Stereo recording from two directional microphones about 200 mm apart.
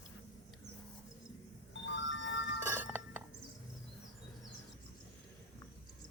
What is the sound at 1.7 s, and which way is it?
Music, 65° left (ahead or behind).